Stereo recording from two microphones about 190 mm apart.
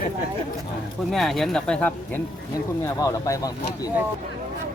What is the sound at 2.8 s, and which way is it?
Speech, 15° left (ahead or behind).